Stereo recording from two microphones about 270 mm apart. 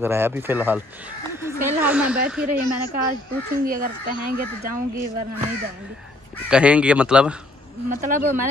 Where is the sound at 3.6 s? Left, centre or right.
Right.